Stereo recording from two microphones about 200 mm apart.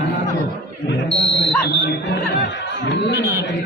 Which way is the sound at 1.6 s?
60° left (ahead or behind).